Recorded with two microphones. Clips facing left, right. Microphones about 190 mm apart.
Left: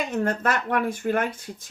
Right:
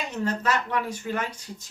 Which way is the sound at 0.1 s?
50° left (ahead or behind).